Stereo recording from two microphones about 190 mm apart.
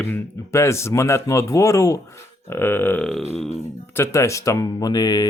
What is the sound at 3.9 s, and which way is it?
Speech, 15° left (ahead or behind).